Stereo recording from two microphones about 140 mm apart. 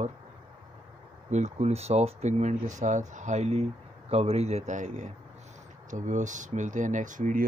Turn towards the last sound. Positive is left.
turn(degrees=-65)  # may be behind; listen again after turning